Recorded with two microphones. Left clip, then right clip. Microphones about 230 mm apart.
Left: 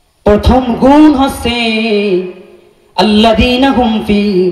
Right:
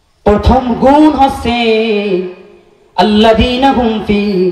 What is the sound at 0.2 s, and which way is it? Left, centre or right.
A man's voice, left.